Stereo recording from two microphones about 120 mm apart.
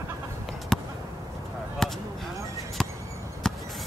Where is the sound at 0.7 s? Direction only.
5° left (ahead or behind).